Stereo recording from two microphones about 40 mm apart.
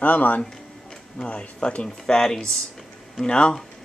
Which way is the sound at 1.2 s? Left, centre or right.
Left.